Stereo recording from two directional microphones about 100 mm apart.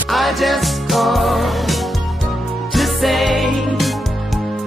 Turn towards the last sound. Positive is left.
turn(degrees=0)  # may be behind; listen again after turning